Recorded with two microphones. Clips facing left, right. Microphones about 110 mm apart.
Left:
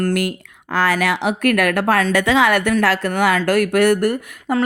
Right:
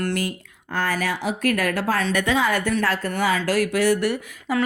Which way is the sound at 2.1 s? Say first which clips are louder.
Left 5 dB; 90° left.